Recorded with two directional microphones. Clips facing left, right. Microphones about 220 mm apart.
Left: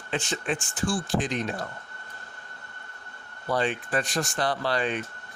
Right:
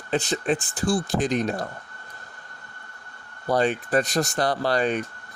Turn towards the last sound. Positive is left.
turn(degrees=-40)  # may be behind; listen again after turning